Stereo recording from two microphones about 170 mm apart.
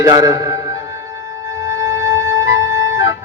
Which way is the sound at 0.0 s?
20° right (ahead or behind).